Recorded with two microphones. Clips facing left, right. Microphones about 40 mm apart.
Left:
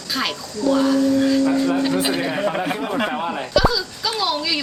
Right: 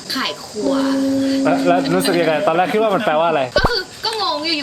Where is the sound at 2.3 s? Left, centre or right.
Right.